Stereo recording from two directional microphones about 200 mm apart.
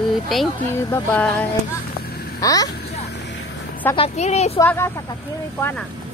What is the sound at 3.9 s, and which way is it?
Speech, 30° left (ahead or behind).